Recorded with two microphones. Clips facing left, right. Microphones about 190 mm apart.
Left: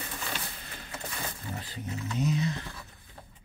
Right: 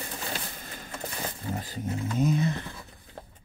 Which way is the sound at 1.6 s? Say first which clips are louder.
Right 5 dB; 45° right (ahead or behind).